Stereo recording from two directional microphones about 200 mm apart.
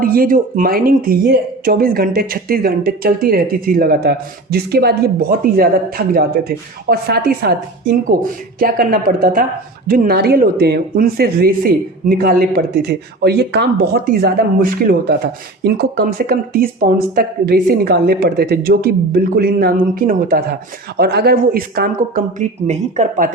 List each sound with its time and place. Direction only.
0.0 s speech: 45° right (ahead or behind)